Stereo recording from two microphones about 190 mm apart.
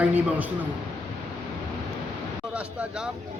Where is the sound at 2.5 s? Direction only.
5° right (ahead or behind).